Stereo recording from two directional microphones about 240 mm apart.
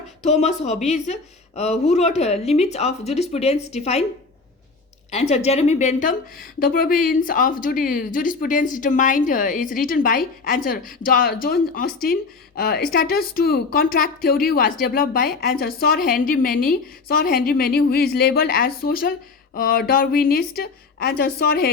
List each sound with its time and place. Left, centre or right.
0.2 s speech: left
5.1 s a woman's voice: left